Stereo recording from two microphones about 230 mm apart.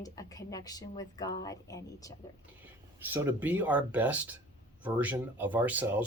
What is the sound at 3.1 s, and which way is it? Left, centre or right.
Speech, centre.